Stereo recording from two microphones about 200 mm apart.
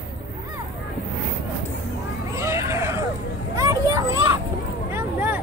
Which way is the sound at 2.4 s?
15° right (ahead or behind).